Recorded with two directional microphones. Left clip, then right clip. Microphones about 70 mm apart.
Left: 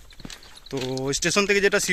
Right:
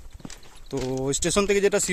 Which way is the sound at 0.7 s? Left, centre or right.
Right.